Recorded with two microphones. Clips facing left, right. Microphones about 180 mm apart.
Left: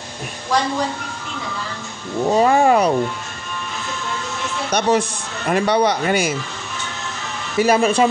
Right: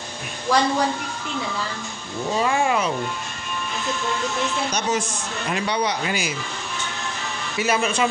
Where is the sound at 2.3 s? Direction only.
40° left (ahead or behind).